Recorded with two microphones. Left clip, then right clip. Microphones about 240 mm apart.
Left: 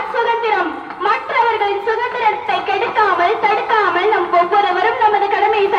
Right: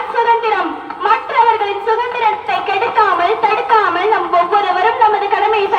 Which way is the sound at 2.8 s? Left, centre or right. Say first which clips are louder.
Right 3 dB; centre.